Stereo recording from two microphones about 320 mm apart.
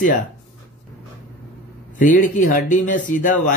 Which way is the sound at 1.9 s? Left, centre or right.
Left.